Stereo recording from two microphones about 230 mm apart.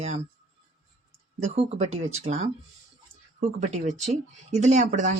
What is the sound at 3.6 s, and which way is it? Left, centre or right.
Speech, right.